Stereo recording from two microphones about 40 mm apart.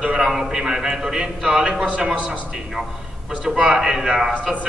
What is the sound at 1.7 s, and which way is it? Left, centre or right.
Speech, right.